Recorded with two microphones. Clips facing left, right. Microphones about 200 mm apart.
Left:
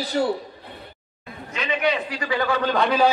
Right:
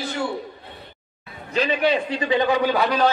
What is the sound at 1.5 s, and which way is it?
A man's voice, 35° right (ahead or behind).